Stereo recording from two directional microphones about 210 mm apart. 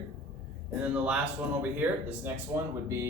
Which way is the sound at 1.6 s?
10° right (ahead or behind).